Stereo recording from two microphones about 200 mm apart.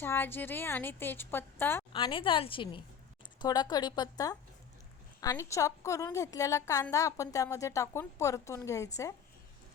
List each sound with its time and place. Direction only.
0.0 s a woman's voice: 10° left (ahead or behind)
1.9 s a woman's voice: 25° left (ahead or behind)